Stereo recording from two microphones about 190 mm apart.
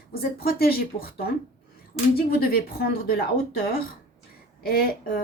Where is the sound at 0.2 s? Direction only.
55° left (ahead or behind).